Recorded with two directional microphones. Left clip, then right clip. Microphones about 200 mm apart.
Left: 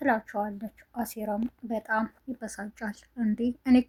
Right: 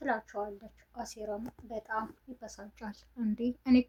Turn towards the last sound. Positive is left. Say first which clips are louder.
# left 4 dB
turn(degrees=20)  # may be behind; listen again after turning